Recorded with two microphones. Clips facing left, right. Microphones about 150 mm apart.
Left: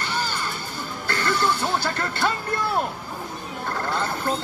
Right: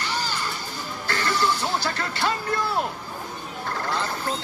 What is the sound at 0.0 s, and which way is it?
Music, 55° left (ahead or behind).